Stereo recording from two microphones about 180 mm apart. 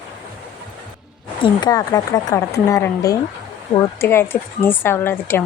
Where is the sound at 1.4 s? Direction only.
25° left (ahead or behind).